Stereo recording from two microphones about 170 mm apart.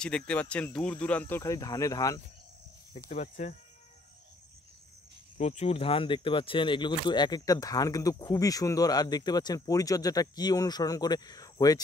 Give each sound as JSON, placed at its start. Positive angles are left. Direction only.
{"t": 0.0, "sound": "speech", "side_deg": 5}
{"t": 2.9, "sound": "speech", "side_deg": 40}
{"t": 5.4, "sound": "speech", "side_deg": 40}